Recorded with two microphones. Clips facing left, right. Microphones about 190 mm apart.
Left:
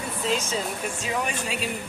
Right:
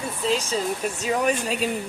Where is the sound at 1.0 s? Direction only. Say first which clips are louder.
Right 7 dB; 40° right (ahead or behind).